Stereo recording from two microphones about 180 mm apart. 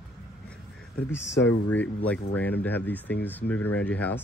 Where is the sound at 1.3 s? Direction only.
80° left.